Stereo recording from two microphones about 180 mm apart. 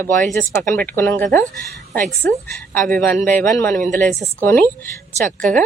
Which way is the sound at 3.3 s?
10° left (ahead or behind).